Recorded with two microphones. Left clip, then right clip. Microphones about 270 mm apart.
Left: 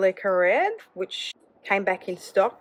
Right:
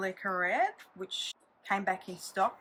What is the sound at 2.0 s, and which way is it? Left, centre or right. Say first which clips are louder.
Speech: left 12 dB; centre.